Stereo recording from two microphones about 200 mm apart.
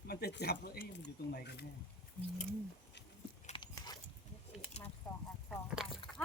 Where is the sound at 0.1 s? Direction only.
55° left (ahead or behind).